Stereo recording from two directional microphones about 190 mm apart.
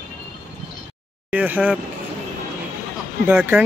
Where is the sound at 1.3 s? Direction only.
10° right (ahead or behind).